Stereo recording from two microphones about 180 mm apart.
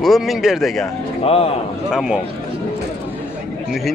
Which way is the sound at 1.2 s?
30° left (ahead or behind).